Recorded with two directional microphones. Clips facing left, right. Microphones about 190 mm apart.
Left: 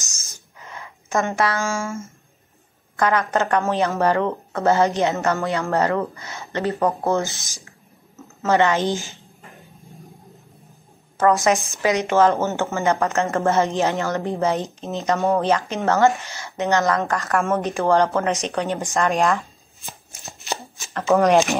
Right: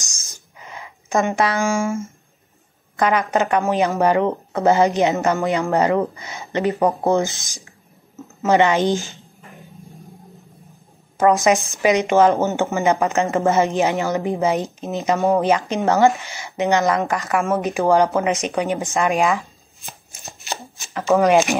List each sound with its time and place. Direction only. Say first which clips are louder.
0.6 s a sound: right 1 dB; 15° right (ahead or behind)
3.0 s speech: right 2 dB; 15° right (ahead or behind)
11.1 s speech: right 2 dB; 15° right (ahead or behind)
20.9 s speech: right 1 dB; centre (ahead or behind)